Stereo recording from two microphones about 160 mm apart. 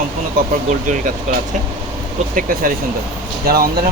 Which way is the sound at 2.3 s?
60° right (ahead or behind).